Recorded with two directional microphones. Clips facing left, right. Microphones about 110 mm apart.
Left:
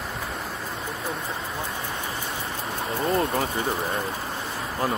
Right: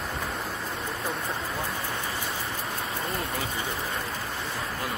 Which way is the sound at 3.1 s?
35° left (ahead or behind).